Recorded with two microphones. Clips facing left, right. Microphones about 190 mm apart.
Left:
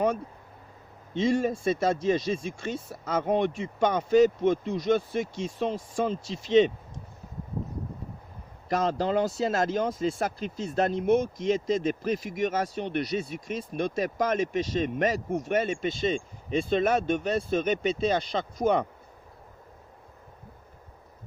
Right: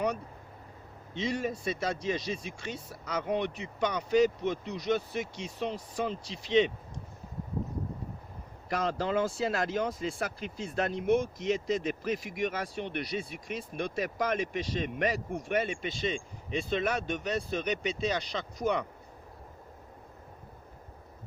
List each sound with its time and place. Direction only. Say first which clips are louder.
1.1 s speech: left 7 dB; 45° left (ahead or behind)
8.7 s speech: left 4 dB; 40° left (ahead or behind)